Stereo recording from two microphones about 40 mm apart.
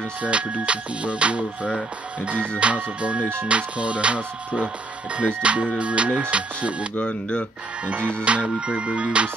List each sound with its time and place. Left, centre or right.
0.2 s speech: right
7.0 s speech: left
8.2 s music: right